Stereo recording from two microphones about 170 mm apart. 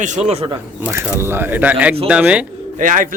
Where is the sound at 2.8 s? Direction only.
50° right (ahead or behind).